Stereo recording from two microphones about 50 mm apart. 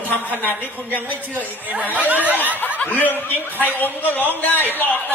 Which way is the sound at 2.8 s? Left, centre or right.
Left.